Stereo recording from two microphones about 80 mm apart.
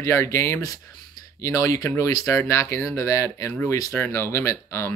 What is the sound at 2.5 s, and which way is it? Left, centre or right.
Speech, left.